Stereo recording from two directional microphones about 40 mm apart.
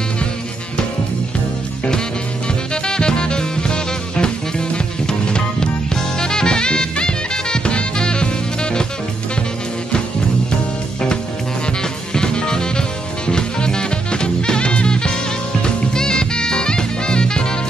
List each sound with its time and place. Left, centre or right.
2.7 s music: centre
12.2 s music: centre